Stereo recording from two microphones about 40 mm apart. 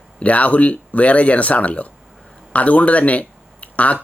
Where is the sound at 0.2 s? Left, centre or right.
Left.